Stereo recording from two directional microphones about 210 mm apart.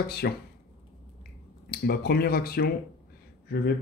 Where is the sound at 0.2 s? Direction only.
55° left (ahead or behind).